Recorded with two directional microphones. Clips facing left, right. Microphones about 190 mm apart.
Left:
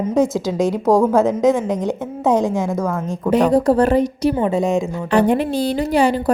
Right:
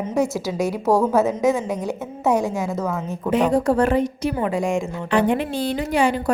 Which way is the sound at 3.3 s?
35° left (ahead or behind).